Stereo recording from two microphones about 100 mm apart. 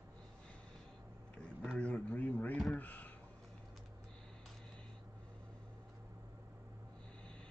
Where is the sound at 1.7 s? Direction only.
10° left (ahead or behind).